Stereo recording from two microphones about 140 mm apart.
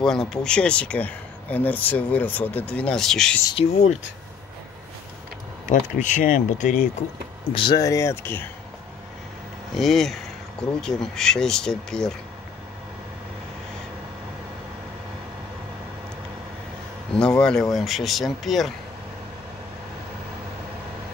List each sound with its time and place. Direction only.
0.0 s speech: 5° left (ahead or behind)
3.5 s speech: 55° left (ahead or behind)
5.7 s speech: 65° left (ahead or behind)
7.5 s speech: 35° left (ahead or behind)
7.8 s speech: 20° left (ahead or behind)
9.8 s speech: centre (ahead or behind)
17.4 s speech: 5° left (ahead or behind)